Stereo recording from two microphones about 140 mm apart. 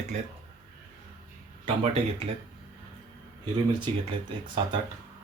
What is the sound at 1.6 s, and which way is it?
Speech, 45° right (ahead or behind).